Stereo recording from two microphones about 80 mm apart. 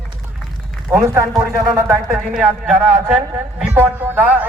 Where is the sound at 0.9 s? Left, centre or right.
Right.